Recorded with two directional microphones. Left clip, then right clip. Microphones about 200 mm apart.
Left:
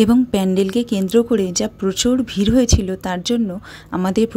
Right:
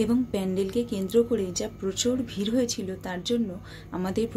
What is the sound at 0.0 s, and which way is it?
A woman's voice, 45° left (ahead or behind).